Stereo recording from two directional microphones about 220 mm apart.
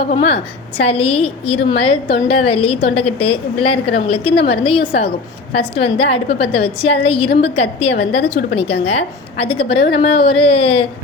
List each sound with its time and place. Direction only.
0.1 s a woman's voice: 30° left (ahead or behind)